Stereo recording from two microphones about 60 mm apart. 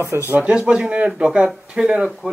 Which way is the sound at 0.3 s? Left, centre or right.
Centre.